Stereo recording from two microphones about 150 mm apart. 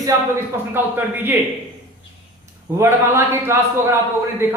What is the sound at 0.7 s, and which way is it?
Speech, 15° right (ahead or behind).